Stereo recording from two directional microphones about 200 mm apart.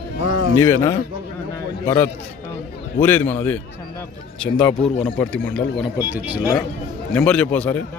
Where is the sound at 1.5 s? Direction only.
15° left (ahead or behind).